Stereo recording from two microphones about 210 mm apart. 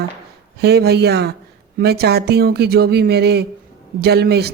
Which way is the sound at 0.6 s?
50° right (ahead or behind).